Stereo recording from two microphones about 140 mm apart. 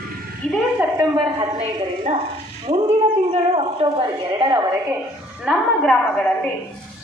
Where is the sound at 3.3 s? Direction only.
45° right (ahead or behind).